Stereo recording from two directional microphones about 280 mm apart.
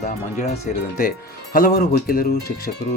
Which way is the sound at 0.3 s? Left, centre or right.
Left.